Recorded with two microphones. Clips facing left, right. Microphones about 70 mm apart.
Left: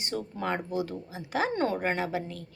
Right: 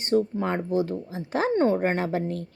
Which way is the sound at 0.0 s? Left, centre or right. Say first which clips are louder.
Right 9 dB; right.